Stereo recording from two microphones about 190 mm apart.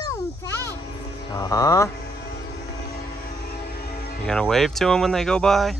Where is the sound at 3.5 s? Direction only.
55° left (ahead or behind).